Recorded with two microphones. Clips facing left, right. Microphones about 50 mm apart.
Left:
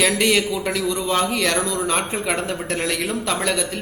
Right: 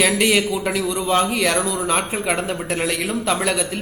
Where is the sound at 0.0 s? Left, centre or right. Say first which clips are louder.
Right 1 dB; centre.